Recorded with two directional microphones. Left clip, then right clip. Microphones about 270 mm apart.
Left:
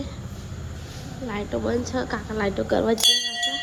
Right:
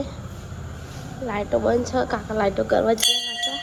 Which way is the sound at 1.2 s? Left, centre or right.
Centre.